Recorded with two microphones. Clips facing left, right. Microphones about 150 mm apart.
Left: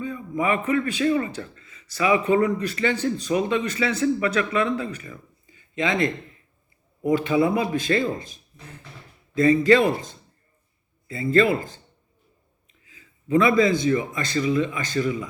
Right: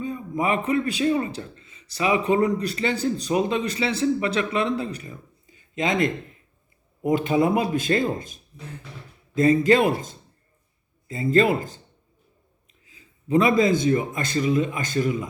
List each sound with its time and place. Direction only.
0.0 s a sound: 35° right (ahead or behind)
0.6 s speech: 30° right (ahead or behind)
2.1 s a man's voice: 50° left (ahead or behind)
2.6 s speech: 35° right (ahead or behind)
5.7 s speech: 40° right (ahead or behind)
7.3 s a man's voice: 45° right (ahead or behind)
13.4 s a man's voice: 45° right (ahead or behind)